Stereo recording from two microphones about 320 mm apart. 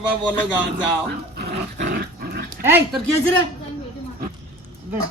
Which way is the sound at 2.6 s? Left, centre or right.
Centre.